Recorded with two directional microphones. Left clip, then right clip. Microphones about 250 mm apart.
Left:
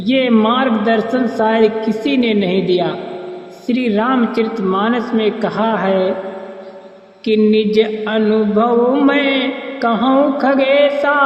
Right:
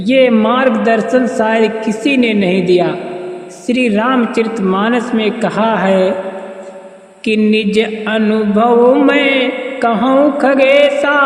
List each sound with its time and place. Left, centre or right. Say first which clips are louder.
0.0 s music: right 4 dB; right
7.3 s music: even; right